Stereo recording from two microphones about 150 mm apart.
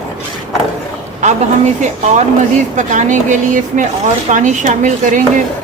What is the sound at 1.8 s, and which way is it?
Speech, 50° right (ahead or behind).